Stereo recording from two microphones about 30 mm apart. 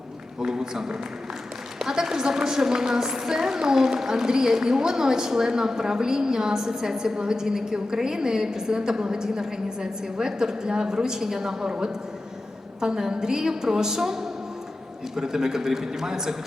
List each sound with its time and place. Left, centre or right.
0.3 s a woman's voice: right
12.8 s a woman's voice: right